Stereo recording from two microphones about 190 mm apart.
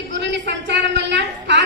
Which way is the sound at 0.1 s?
65° right (ahead or behind).